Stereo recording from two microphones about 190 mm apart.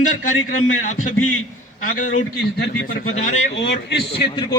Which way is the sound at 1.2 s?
90° left.